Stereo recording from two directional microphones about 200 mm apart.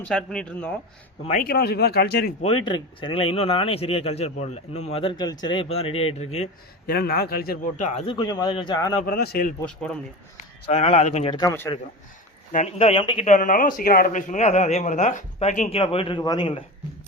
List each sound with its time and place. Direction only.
0.1 s speech: 5° left (ahead or behind)
1.2 s a man's voice: 35° left (ahead or behind)
1.5 s speech: 50° left (ahead or behind)
2.6 s speech: 25° left (ahead or behind)
6.8 s a man's voice: 50° left (ahead or behind); by 9.0 s 20° left (ahead or behind)
9.0 s speech: 45° left (ahead or behind)
9.6 s speech: 5° left (ahead or behind)
10.7 s speech: 30° left (ahead or behind); by 11.7 s 15° left (ahead or behind)
12.5 s speech: 35° left (ahead or behind)
13.2 s a man's voice: 40° left (ahead or behind); by 16.6 s 25° left (ahead or behind)